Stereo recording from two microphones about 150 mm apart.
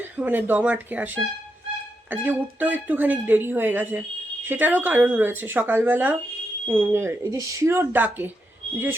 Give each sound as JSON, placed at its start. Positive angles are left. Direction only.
{"t": 0.0, "sound": "speech", "side_deg": -10}